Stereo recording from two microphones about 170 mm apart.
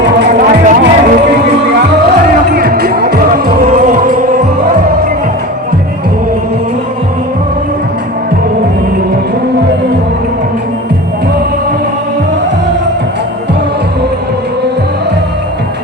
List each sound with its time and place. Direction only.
0.3 s music: 50° right (ahead or behind)
2.5 s music: 60° right (ahead or behind)